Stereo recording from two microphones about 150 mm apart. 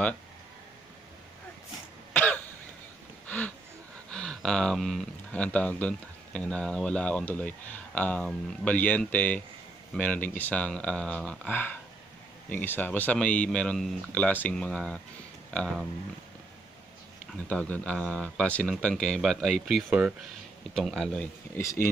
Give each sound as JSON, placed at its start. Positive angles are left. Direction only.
{"t": 2.1, "sound": "cough", "side_deg": 10}
{"t": 3.3, "sound": "a sound", "side_deg": 10}
{"t": 4.1, "sound": "speech", "side_deg": 5}
{"t": 17.3, "sound": "speech", "side_deg": 5}